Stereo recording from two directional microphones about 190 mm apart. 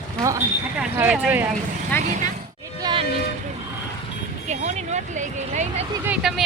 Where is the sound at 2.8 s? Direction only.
25° right (ahead or behind).